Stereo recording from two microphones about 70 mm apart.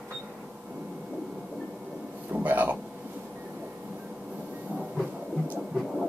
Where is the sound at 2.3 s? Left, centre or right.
Right.